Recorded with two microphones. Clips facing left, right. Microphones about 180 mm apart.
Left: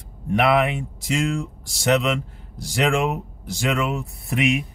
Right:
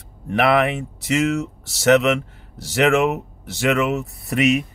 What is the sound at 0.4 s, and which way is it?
Speech, centre (ahead or behind).